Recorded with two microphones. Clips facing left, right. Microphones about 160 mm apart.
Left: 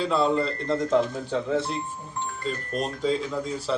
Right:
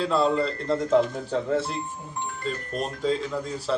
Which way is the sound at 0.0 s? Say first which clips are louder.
Even; centre (ahead or behind).